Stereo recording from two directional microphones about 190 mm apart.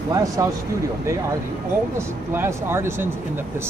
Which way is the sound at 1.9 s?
15° right (ahead or behind).